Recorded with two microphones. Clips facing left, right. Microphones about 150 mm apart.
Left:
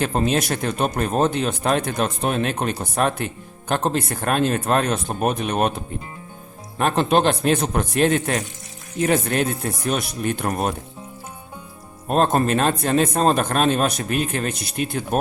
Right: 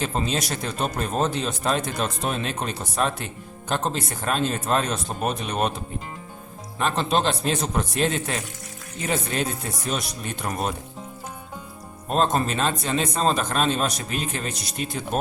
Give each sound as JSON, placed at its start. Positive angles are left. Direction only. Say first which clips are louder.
{"t": 0.0, "sound": "speech", "louder": "left 5 dB", "side_deg": 60}
{"t": 6.7, "sound": "speech", "louder": "left 5 dB", "side_deg": 55}
{"t": 12.1, "sound": "speech", "louder": "left 4 dB", "side_deg": 55}